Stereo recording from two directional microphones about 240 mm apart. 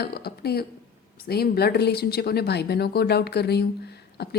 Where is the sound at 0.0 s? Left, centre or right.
Left.